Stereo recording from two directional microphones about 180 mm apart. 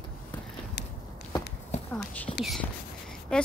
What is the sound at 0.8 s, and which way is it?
Walk, 70° left (ahead or behind).